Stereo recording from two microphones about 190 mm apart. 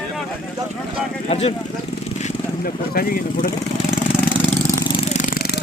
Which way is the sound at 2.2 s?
50° left (ahead or behind).